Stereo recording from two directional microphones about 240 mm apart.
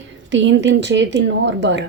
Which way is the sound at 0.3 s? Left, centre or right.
Right.